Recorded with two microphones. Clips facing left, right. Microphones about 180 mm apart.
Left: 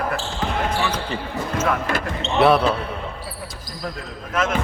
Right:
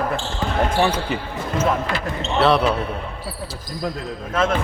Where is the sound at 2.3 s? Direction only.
10° left (ahead or behind).